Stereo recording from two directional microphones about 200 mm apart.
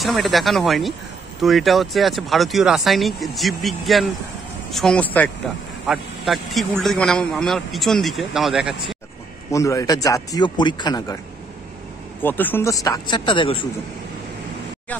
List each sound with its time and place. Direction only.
0.0 s a man's voice: centre (ahead or behind)
9.5 s a man's voice: 15° left (ahead or behind)
12.2 s a man's voice: 10° left (ahead or behind); by 13.7 s 25° left (ahead or behind)